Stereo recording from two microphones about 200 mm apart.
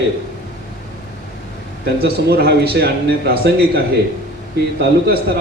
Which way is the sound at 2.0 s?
50° right (ahead or behind).